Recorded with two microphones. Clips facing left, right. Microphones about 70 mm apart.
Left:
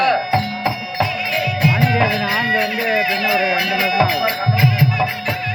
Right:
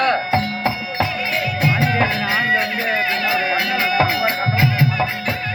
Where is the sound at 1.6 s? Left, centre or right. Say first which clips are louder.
Left 2 dB; right.